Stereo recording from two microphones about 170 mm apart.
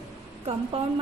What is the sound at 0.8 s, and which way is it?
Speech, 40° right (ahead or behind).